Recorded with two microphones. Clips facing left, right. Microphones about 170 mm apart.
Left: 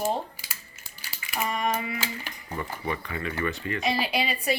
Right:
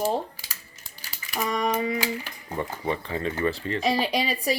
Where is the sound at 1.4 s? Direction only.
35° right (ahead or behind).